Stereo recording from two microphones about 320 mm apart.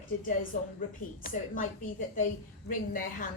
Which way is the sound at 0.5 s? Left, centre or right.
Left.